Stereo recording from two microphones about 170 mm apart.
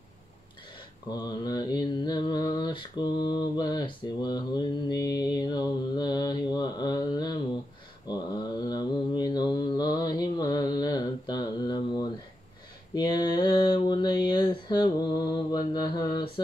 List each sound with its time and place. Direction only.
1.1 s mantra: 25° left (ahead or behind)